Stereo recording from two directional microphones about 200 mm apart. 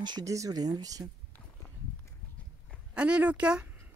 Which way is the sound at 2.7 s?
5° right (ahead or behind).